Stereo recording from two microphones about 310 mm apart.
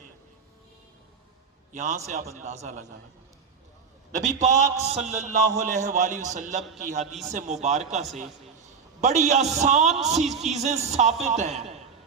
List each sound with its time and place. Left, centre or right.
1.7 s a man's voice: right
4.1 s a man's voice: right